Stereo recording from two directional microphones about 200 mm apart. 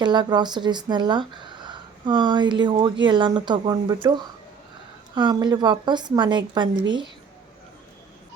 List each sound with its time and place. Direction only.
0.0 s speech: 20° right (ahead or behind)